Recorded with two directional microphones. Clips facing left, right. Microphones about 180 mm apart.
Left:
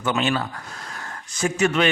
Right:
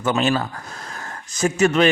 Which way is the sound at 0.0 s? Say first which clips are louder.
Right 3 dB; 40° right (ahead or behind).